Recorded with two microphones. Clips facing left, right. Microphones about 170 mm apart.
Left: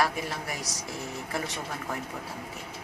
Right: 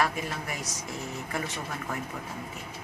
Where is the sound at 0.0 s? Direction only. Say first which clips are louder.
Left 1 dB; 35° left (ahead or behind).